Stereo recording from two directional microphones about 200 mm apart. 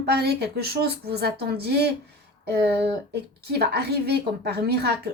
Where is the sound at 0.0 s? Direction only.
55° right (ahead or behind).